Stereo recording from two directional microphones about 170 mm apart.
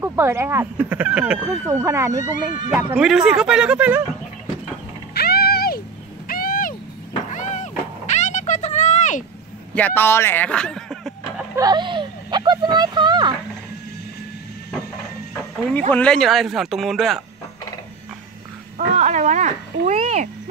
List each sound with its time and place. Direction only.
0.0 s speech: 15° right (ahead or behind)
3.0 s speech: 5° right (ahead or behind)
5.1 s music: 65° left (ahead or behind)
6.2 s owl: 60° left (ahead or behind)
7.3 s a sound: 45° left (ahead or behind)
9.8 s a sound: 10° left (ahead or behind)
11.5 s speech: 25° right (ahead or behind)
15.9 s speech: 5° left (ahead or behind)
18.8 s speech: 45° right (ahead or behind)